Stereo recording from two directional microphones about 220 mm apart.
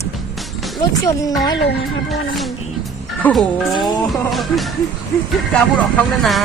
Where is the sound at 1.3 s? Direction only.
15° left (ahead or behind).